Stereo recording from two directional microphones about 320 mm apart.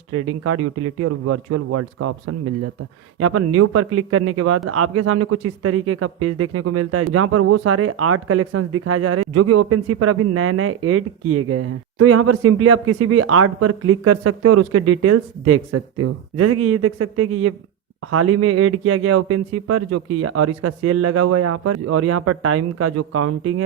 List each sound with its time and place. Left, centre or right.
0.1 s speech: right